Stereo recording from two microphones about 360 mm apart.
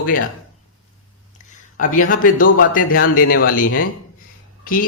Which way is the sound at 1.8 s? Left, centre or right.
Left.